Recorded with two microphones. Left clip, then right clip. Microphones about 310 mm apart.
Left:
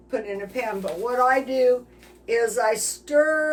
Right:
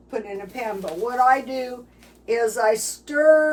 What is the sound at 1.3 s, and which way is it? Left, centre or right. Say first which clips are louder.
Speech: left 2 dB; centre.